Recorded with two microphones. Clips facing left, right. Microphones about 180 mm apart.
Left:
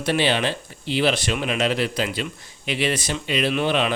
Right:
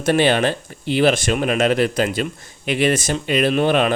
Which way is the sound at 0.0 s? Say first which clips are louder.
Right 5 dB; 50° right (ahead or behind).